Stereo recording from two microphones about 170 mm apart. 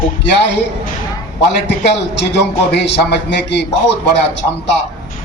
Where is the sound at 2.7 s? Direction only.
80° left.